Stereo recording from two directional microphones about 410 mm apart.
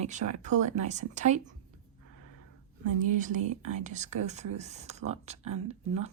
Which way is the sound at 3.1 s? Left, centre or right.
Centre.